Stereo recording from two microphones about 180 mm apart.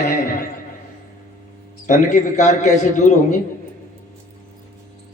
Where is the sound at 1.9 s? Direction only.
45° left (ahead or behind).